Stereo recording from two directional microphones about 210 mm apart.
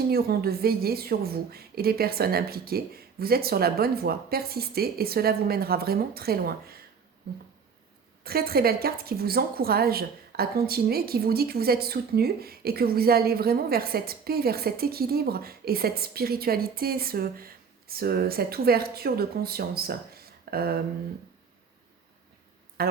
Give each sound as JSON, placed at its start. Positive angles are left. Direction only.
{"t": 0.1, "sound": "a woman's voice", "side_deg": -45}
{"t": 8.2, "sound": "a woman's voice", "side_deg": -45}
{"t": 22.8, "sound": "speech", "side_deg": -45}